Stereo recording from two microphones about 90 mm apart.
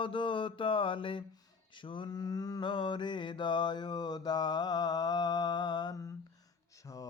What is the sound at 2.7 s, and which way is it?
Mantra, 65° left (ahead or behind).